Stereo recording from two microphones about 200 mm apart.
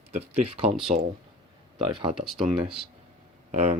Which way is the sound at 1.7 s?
25° right (ahead or behind).